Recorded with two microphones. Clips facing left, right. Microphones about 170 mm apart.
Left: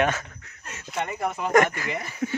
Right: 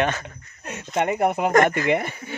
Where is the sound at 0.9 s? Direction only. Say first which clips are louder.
Right 7 dB; 60° right (ahead or behind).